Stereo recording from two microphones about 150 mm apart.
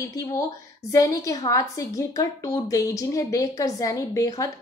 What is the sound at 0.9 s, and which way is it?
A woman's voice, 20° left (ahead or behind).